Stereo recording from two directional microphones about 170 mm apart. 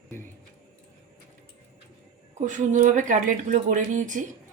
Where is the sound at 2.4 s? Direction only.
50° right (ahead or behind).